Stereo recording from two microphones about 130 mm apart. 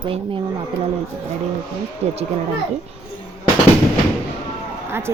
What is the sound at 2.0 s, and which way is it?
Speech, 55° right (ahead or behind).